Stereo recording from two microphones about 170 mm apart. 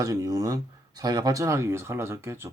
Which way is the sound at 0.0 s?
20° right (ahead or behind).